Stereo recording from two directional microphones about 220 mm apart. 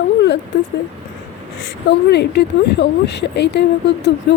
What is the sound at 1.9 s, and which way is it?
Speech, 50° left (ahead or behind).